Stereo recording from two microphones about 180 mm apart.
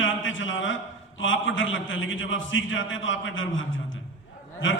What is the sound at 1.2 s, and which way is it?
A man's voice, 90° left.